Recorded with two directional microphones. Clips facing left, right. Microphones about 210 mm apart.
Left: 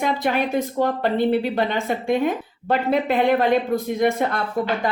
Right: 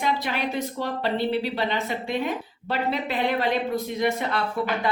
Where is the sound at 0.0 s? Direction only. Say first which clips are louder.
Left 5 dB; 50° left (ahead or behind).